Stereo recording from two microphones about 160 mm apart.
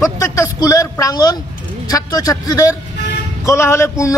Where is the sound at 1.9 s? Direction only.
20° left (ahead or behind).